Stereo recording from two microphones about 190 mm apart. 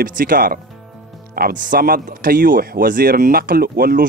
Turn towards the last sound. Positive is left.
turn(degrees=-50)  # may be behind; listen again after turning